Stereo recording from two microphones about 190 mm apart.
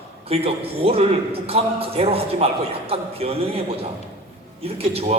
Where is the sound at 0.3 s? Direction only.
30° right (ahead or behind).